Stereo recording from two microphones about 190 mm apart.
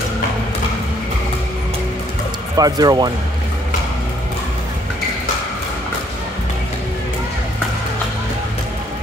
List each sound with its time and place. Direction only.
2.5 s speech: 20° right (ahead or behind)